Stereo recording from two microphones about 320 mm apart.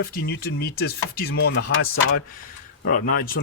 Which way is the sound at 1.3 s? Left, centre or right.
Left.